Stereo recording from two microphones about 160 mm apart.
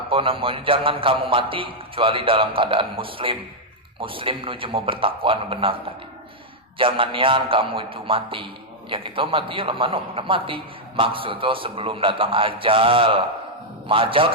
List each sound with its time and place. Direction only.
0.1 s a man's voice: 35° right (ahead or behind)